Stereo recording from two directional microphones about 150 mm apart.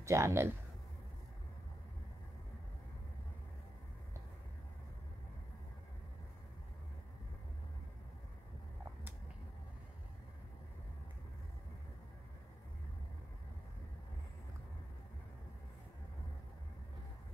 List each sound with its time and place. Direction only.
0.0 s speech: 20° right (ahead or behind)